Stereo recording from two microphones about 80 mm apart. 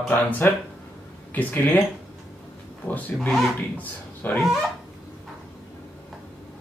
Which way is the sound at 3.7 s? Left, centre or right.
Left.